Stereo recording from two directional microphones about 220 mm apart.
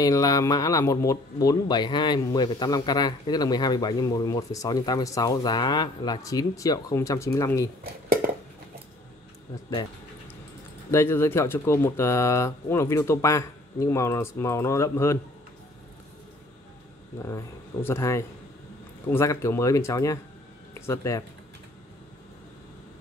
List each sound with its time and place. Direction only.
0.0 s speech: 15° left (ahead or behind)
10.9 s speech: 10° left (ahead or behind)
17.8 s speech: 10° left (ahead or behind)